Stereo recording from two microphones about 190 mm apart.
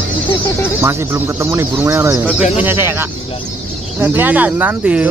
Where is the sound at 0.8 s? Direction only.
10° right (ahead or behind).